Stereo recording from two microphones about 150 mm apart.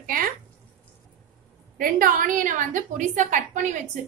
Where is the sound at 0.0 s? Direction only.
70° right (ahead or behind).